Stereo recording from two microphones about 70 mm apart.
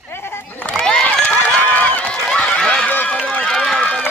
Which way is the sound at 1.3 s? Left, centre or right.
Left.